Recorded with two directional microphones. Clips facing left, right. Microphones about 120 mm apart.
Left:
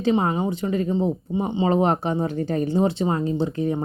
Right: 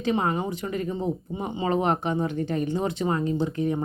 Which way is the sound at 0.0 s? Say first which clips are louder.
Left 4 dB; 30° left (ahead or behind).